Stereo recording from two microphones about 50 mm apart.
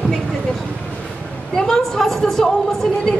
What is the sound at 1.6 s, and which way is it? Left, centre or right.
Speech, centre.